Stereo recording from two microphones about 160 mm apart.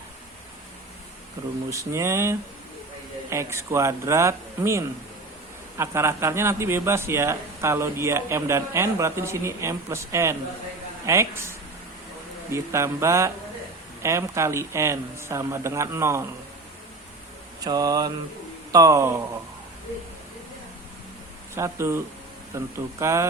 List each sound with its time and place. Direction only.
1.7 s a man's voice: 20° right (ahead or behind)
17.6 s mantra: 25° right (ahead or behind)
21.5 s a man's voice: 15° right (ahead or behind)